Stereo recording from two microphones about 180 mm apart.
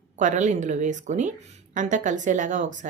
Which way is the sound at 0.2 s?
45° right (ahead or behind).